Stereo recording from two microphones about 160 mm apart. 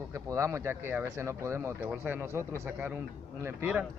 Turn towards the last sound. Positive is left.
turn(degrees=-15)  # may be behind; listen again after turning